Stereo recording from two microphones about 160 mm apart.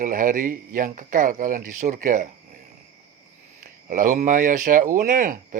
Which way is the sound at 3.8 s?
55° right (ahead or behind).